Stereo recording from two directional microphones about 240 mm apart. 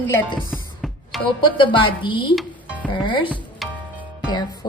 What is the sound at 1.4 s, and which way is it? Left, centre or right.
Speech, centre.